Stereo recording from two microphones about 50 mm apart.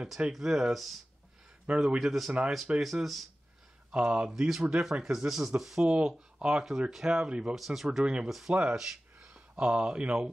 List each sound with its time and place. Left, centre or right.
0.5 s speech: centre
0.7 s speech: centre
1.7 s speech: centre
2.0 s speech: centre
3.9 s speech: right
4.3 s speech: centre
5.9 s speech: right
6.1 s speech: centre
7.5 s speech: centre
8.0 s speech: centre
8.3 s speech: centre
8.7 s a sound: centre
9.6 s speech: centre